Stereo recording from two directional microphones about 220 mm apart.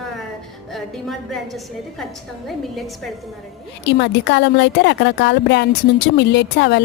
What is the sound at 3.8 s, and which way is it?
A woman's voice, 50° left (ahead or behind).